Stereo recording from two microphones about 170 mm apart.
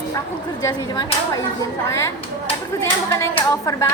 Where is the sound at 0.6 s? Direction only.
20° left (ahead or behind).